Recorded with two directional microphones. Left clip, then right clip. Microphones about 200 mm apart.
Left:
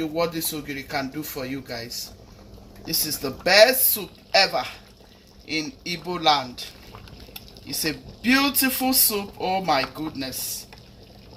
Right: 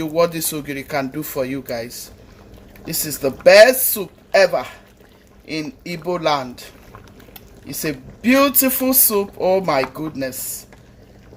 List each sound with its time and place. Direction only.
0.0 s speech: 60° right (ahead or behind)
7.7 s speech: 55° right (ahead or behind)